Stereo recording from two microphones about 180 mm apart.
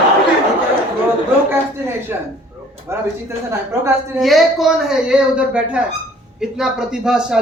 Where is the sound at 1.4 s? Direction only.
10° right (ahead or behind).